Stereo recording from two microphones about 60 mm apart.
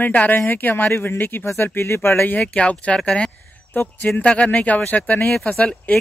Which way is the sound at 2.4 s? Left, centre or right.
Centre.